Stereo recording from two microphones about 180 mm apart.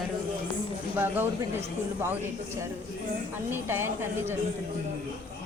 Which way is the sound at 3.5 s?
15° right (ahead or behind).